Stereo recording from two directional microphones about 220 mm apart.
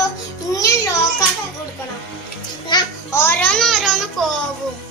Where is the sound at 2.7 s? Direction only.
15° left (ahead or behind); by 4.3 s centre (ahead or behind).